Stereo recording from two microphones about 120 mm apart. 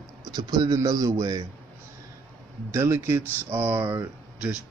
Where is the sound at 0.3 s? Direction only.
35° right (ahead or behind).